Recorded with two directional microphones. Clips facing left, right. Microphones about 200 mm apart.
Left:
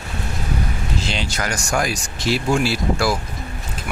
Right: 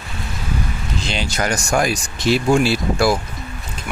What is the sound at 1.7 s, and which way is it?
Speech, 20° right (ahead or behind).